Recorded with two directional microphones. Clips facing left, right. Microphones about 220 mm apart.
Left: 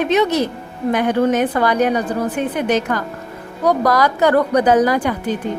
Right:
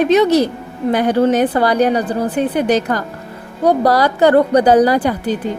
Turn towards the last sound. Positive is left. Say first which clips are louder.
# right 3 dB
turn(degrees=-35)  # may be behind; listen again after turning